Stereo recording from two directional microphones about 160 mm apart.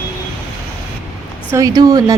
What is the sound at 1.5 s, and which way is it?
Speech, 25° right (ahead or behind).